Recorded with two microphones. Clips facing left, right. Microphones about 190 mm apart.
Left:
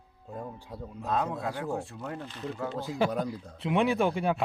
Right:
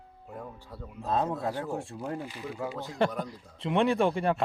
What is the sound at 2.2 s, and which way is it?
Speech, 10° right (ahead or behind).